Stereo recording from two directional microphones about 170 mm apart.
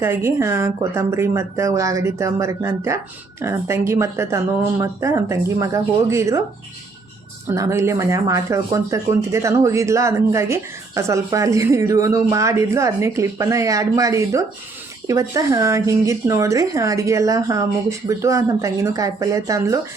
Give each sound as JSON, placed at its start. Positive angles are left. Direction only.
{"t": 0.0, "sound": "speech", "side_deg": -15}
{"t": 7.4, "sound": "speech", "side_deg": -15}